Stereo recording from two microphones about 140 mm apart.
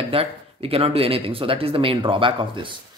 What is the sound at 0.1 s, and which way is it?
Speech, 45° right (ahead or behind).